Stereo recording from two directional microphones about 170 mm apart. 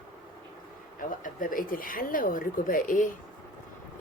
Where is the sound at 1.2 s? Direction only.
55° left (ahead or behind).